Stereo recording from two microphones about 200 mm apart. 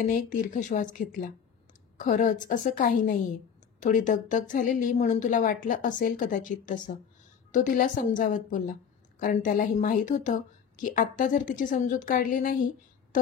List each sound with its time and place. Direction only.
0.0 s a woman's voice: 40° left (ahead or behind)